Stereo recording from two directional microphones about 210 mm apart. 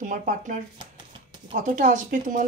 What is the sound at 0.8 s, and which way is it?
Shuffling cards, 25° right (ahead or behind).